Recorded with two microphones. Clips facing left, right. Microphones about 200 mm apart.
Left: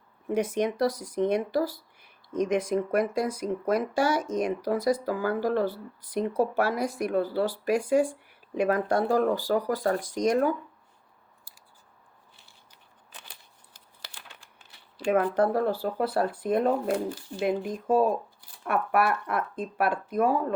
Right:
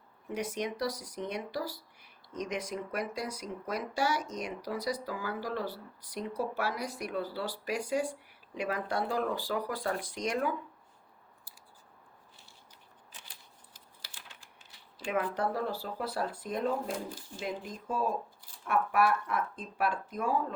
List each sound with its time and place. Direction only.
0.3 s speech: 50° left (ahead or behind)
13.1 s crumpling: 65° left (ahead or behind)
15.1 s speech: 55° left (ahead or behind)